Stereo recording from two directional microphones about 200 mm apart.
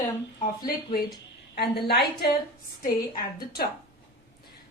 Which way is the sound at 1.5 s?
55° left (ahead or behind).